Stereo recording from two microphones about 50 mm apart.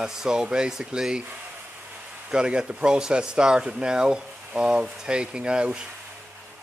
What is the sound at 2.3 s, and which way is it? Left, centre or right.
Speech, centre.